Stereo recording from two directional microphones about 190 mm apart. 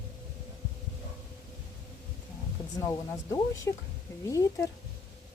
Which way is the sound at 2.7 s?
15° left (ahead or behind).